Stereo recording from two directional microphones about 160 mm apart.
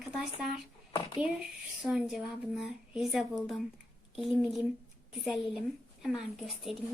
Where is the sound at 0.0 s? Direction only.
5° right (ahead or behind).